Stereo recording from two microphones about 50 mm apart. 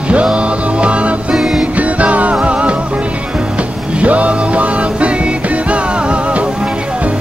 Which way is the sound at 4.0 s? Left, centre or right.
Right.